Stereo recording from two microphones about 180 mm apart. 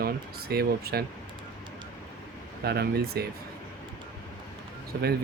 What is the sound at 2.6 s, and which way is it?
Speech, 60° right (ahead or behind).